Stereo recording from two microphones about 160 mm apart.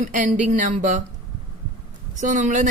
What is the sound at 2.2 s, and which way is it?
Speech, 50° right (ahead or behind).